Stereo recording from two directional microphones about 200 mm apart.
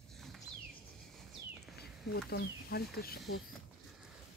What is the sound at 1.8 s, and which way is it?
Speech, 50° left (ahead or behind).